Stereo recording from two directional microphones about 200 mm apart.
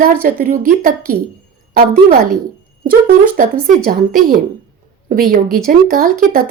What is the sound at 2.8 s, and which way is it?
A woman's voice, 45° right (ahead or behind).